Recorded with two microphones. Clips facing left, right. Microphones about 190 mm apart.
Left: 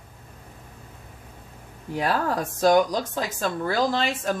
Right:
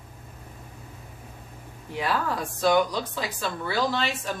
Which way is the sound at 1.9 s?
40° left (ahead or behind).